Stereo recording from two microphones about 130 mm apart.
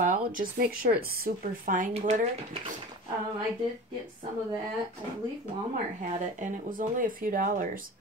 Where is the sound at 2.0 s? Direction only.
70° right (ahead or behind).